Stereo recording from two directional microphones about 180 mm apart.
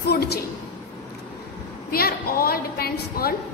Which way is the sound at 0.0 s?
65° left (ahead or behind).